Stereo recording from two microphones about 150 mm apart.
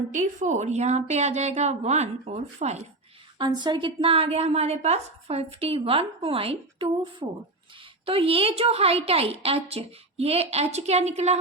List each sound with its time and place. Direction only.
0.1 s a woman's voice: 55° right (ahead or behind)
3.3 s a woman's voice: 30° right (ahead or behind); by 11.3 s 45° right (ahead or behind)